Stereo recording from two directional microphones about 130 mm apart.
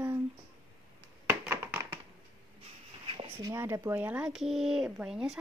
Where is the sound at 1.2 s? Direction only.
20° right (ahead or behind).